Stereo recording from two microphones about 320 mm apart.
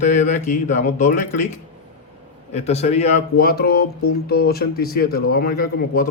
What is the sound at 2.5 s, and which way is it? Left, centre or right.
Speech, centre.